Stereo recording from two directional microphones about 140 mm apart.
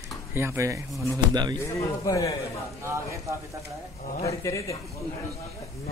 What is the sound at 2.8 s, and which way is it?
Speech, 20° right (ahead or behind).